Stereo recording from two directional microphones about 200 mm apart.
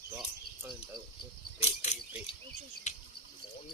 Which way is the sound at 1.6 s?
35° left (ahead or behind).